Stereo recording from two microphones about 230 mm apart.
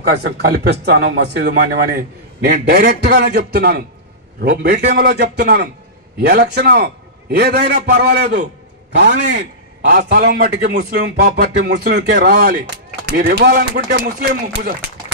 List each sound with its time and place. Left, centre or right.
0.0 s a man's voice: right